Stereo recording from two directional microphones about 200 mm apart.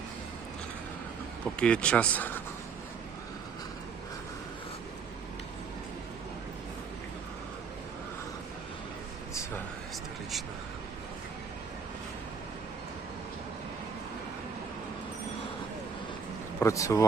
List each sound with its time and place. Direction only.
1.5 s speech: 5° left (ahead or behind)
16.6 s speech: 15° left (ahead or behind)